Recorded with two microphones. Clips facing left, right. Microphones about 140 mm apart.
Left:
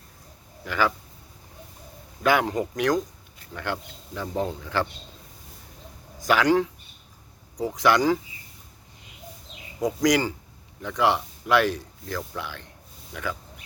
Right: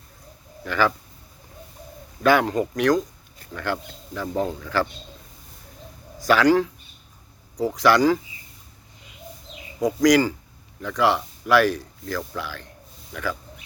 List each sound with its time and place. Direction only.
0.6 s speech: 15° left (ahead or behind)
2.2 s speech: 15° left (ahead or behind)
6.1 s a man's voice: 20° left (ahead or behind)
7.8 s speech: 20° left (ahead or behind)
9.8 s speech: 20° left (ahead or behind)